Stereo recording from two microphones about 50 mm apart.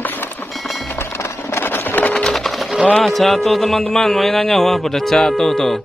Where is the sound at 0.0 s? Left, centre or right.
Left.